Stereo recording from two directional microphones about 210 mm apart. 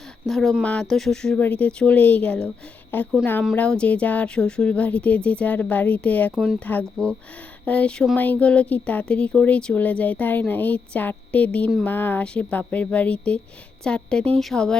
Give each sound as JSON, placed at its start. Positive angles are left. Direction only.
{"t": 0.3, "sound": "speech", "side_deg": 0}